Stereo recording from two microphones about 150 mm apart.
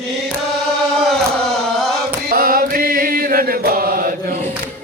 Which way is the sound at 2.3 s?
75° right (ahead or behind).